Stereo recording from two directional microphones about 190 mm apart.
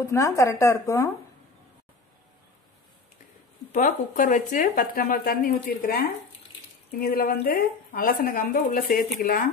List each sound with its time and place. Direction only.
0.0 s speech: 15° left (ahead or behind)
3.7 s speech: 45° left (ahead or behind)